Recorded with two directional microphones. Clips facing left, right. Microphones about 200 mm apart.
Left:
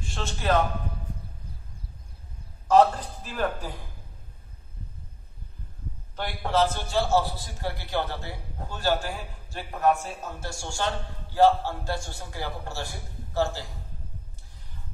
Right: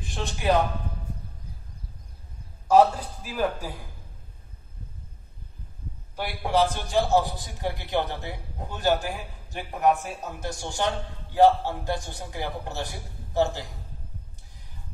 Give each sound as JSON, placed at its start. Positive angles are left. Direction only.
{"t": 0.0, "sound": "speech", "side_deg": -15}
{"t": 2.7, "sound": "a man's voice", "side_deg": -10}
{"t": 6.1, "sound": "a man's voice", "side_deg": -10}